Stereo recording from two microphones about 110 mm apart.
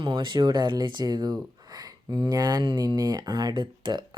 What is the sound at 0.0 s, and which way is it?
Speech, 50° right (ahead or behind).